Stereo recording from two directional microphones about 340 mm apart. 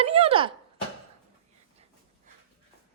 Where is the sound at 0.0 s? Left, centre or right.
Centre.